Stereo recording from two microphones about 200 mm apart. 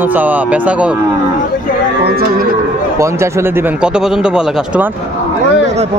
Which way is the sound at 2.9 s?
15° right (ahead or behind).